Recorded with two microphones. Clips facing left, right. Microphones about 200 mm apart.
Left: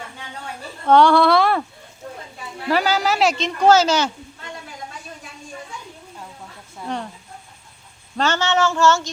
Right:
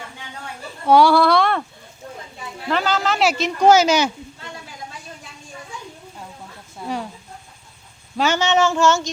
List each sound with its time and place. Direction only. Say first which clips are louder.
0.9 s speech: even; 10° right (ahead or behind)
2.6 s speech: left 2 dB; 10° left (ahead or behind)
3.2 s female singing: right 2 dB; 5° right (ahead or behind)
6.8 s a sound: right 1 dB; 5° right (ahead or behind)
8.1 s female singing: right 2 dB; 10° right (ahead or behind)